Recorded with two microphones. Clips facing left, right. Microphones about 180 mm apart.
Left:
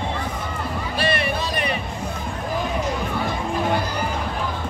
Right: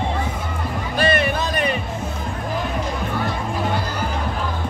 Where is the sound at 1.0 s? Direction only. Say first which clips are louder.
Right 4 dB; 45° right (ahead or behind).